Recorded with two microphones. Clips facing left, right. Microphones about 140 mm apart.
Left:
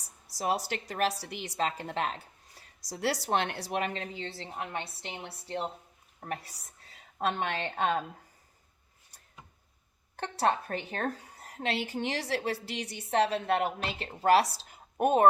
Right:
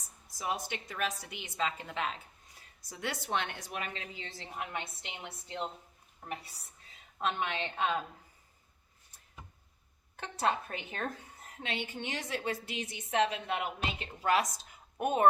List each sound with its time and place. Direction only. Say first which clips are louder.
0.0 s a woman's voice: left 6 dB; 35° left (ahead or behind)
10.3 s a woman's voice: left 4 dB; 40° left (ahead or behind)
14.7 s a sound: left 6 dB; 40° left (ahead or behind)